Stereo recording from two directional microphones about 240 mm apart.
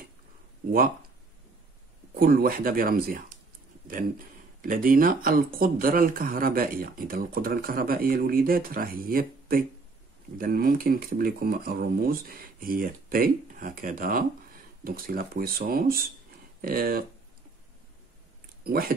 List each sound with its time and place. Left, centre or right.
0.7 s speech: right
2.1 s speech: right
4.6 s speech: right
18.6 s speech: right